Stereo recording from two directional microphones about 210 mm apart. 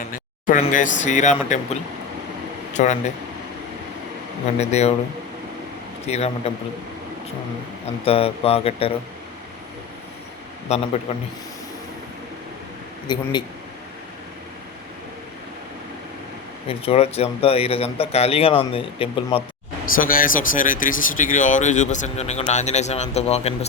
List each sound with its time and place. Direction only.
0.1 s a sound: 40° left (ahead or behind)
0.6 s speech: 35° left (ahead or behind)
4.5 s speech: 30° left (ahead or behind)
6.1 s speech: 30° left (ahead or behind)
8.0 s speech: 25° left (ahead or behind)
10.7 s speech: 30° left (ahead or behind)
13.1 s speech: 20° left (ahead or behind)
16.6 s speech: 30° left (ahead or behind)
19.8 s speech: 40° left (ahead or behind)